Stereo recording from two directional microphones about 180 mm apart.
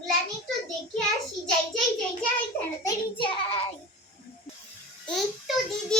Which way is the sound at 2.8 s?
30° left (ahead or behind).